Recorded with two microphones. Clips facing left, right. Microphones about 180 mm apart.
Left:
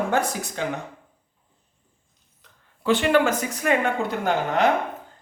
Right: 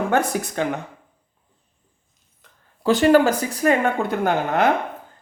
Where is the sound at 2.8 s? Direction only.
40° right (ahead or behind).